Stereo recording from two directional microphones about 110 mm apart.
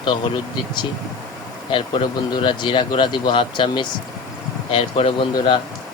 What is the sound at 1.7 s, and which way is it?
Speech, 50° left (ahead or behind).